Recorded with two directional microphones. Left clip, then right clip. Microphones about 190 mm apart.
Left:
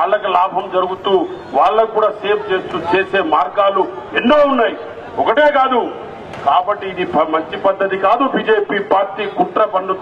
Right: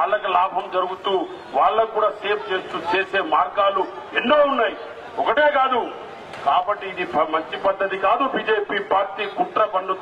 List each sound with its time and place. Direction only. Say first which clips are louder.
0.0 s a man's voice: left 5 dB; 15° left (ahead or behind)